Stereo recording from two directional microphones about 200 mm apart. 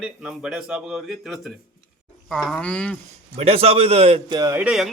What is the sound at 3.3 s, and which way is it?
A man's voice, 30° right (ahead or behind).